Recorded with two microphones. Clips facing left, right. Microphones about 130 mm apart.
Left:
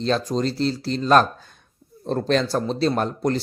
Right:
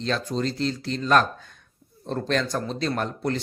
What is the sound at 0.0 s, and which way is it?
Speech, 35° left (ahead or behind).